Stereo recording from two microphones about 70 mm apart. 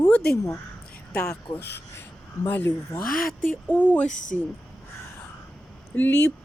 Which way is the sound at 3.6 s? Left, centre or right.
Left.